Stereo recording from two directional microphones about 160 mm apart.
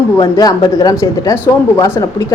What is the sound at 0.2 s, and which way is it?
A woman's voice, 20° left (ahead or behind).